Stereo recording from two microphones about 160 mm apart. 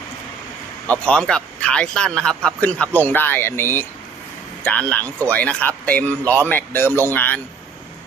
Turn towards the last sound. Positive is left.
turn(degrees=10)  # may be behind; listen again after turning